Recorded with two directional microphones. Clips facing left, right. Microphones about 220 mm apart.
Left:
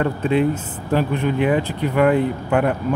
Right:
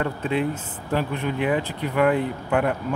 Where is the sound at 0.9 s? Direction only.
30° left (ahead or behind).